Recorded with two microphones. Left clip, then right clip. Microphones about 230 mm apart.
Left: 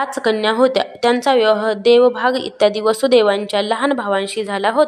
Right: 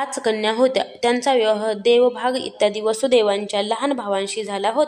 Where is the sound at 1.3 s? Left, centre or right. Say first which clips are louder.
Left 4 dB; left.